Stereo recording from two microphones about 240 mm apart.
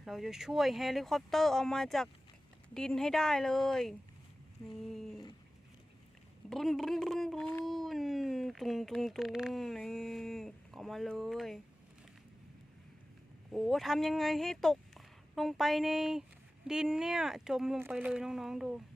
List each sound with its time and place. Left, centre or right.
0.0 s speech: centre
6.5 s speech: centre
13.5 s speech: centre